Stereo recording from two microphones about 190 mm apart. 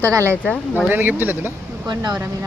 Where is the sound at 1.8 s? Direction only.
20° right (ahead or behind).